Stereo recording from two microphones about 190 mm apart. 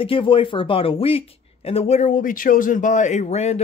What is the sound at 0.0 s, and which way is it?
A man's voice, 30° left (ahead or behind).